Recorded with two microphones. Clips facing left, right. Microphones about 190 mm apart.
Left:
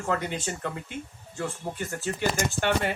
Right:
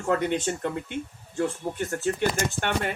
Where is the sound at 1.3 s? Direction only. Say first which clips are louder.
Right 5 dB; 50° right (ahead or behind).